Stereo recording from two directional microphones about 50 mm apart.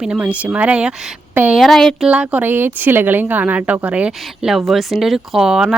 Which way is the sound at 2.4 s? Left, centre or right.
Right.